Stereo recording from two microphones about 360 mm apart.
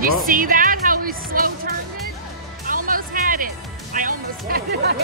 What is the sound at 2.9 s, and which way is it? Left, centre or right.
Music, right.